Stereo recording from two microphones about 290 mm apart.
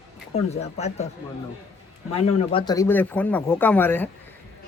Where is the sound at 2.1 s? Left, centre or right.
Centre.